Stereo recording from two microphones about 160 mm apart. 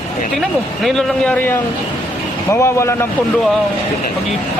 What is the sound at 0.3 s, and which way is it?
A man's voice, centre (ahead or behind).